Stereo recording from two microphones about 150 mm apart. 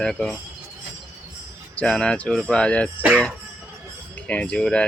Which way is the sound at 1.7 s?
5° left (ahead or behind).